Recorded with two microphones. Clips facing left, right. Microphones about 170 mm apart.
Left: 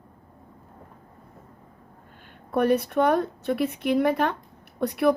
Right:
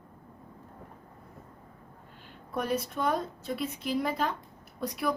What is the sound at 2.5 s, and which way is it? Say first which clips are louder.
Speech: left 9 dB; 65° left (ahead or behind).